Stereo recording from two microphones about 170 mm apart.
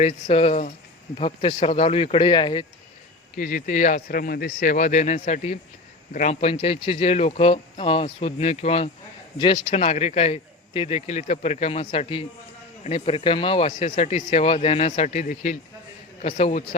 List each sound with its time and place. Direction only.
0.0 s speech: 35° left (ahead or behind)
3.3 s speech: 55° left (ahead or behind); by 13.7 s 30° left (ahead or behind)
13.7 s speech: 45° left (ahead or behind)